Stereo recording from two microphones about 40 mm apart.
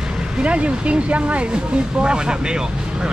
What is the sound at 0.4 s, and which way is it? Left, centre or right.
Speech, right.